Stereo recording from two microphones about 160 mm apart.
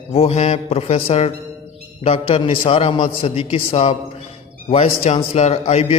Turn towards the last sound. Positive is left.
turn(degrees=40)  # may be behind; listen again after turning